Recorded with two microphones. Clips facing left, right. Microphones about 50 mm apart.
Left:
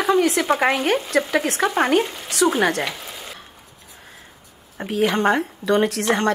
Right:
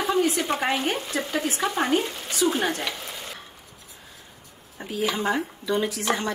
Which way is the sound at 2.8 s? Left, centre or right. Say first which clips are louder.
Left 3 dB; centre.